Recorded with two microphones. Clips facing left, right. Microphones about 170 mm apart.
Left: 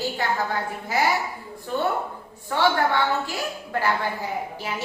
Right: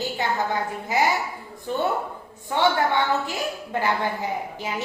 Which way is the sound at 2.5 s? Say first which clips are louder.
Even; 20° right (ahead or behind).